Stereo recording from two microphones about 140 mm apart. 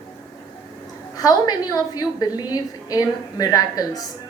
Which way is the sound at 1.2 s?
30° left (ahead or behind).